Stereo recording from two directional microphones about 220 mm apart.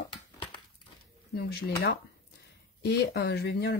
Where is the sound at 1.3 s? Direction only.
45° left (ahead or behind).